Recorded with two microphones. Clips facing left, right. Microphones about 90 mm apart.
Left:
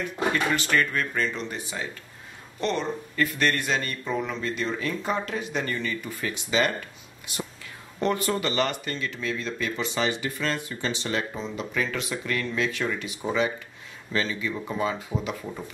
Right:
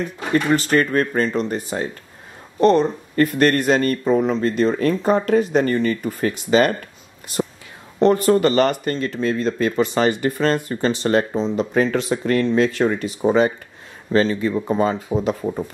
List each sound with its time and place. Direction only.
0.3 s speech: 35° right (ahead or behind)
8.0 s speech: 40° right (ahead or behind)
11.3 s speech: 35° right (ahead or behind)